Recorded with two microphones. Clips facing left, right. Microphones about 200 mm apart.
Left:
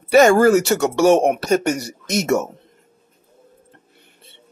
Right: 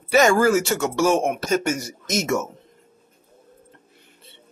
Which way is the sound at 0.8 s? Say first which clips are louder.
Left 6 dB; 65° left (ahead or behind).